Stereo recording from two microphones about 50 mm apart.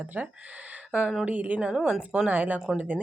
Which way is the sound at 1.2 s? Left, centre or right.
Right.